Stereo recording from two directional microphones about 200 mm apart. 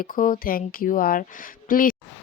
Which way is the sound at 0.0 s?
45° left (ahead or behind).